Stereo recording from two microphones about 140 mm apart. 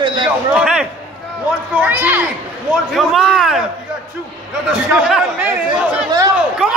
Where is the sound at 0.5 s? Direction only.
5° right (ahead or behind).